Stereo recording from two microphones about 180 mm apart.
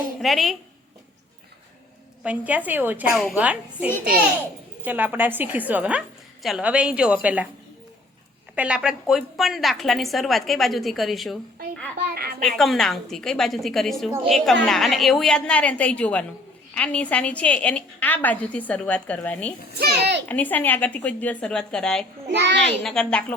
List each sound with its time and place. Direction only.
0.2 s a woman's voice: centre (ahead or behind)
2.2 s a woman's voice: 10° right (ahead or behind)
8.5 s a woman's voice: 5° right (ahead or behind)
12.1 s speech: 60° right (ahead or behind)
12.5 s a woman's voice: centre (ahead or behind)
19.8 s a child's voice: 65° right (ahead or behind)
20.2 s a woman's voice: 10° left (ahead or behind)
22.3 s a child's voice: 75° right (ahead or behind)
22.8 s a woman's voice: 5° left (ahead or behind)